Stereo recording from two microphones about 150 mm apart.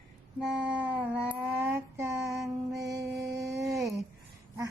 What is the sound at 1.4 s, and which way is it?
Female singing, 20° right (ahead or behind).